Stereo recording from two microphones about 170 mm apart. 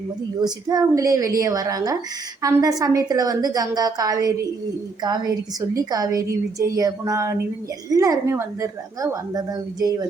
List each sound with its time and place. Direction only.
0.3 s a woman's voice: 25° right (ahead or behind)